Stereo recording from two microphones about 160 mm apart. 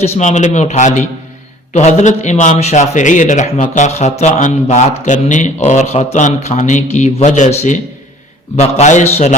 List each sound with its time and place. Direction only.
0.0 s a man's voice: 45° left (ahead or behind)